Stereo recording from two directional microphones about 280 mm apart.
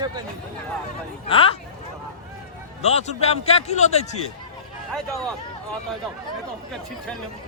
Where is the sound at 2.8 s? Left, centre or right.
Left.